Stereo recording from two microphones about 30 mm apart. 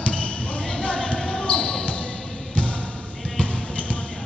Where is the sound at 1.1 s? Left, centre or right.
Left.